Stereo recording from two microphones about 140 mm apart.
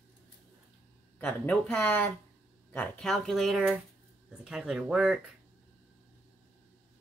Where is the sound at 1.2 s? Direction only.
10° left (ahead or behind).